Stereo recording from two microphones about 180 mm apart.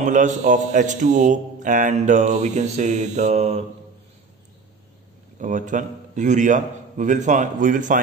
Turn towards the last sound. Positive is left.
turn(degrees=-45)  # may be behind; listen again after turning